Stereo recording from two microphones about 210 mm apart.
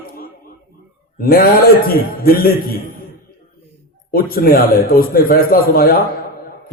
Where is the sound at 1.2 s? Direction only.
45° left (ahead or behind).